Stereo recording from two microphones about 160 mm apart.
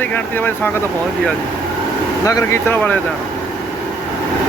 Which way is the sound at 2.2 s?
20° left (ahead or behind).